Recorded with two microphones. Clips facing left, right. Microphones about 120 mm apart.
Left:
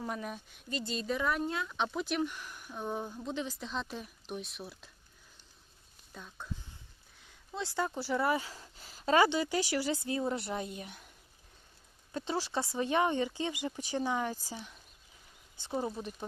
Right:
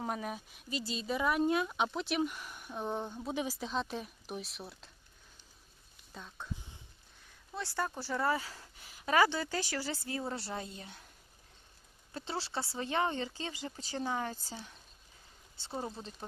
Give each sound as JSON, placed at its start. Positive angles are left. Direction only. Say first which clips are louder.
{"t": 0.2, "sound": "speech", "louder": "right 1 dB", "side_deg": -5}
{"t": 1.8, "sound": "speech", "louder": "even", "side_deg": 0}
{"t": 3.2, "sound": "speech", "louder": "right 1 dB", "side_deg": -10}
{"t": 6.1, "sound": "speech", "louder": "even", "side_deg": 0}
{"t": 7.5, "sound": "speech", "louder": "left 2 dB", "side_deg": 15}
{"t": 12.1, "sound": "speech", "louder": "left 4 dB", "side_deg": 15}